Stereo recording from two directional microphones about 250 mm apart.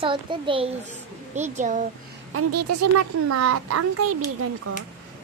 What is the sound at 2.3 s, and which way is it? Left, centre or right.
A child's voice, right.